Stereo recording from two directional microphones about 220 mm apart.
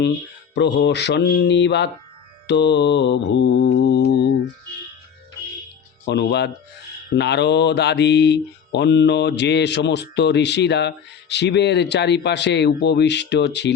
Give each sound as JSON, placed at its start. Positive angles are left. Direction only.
{"t": 0.5, "sound": "speech", "side_deg": 50}
{"t": 6.1, "sound": "speech", "side_deg": 50}